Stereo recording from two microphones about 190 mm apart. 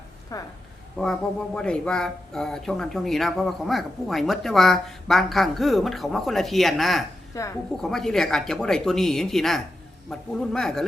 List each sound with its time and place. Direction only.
0.3 s a woman's voice: 20° left (ahead or behind)
0.9 s speech: 5° left (ahead or behind)
7.3 s a woman's voice: 15° left (ahead or behind)
7.8 s speech: centre (ahead or behind)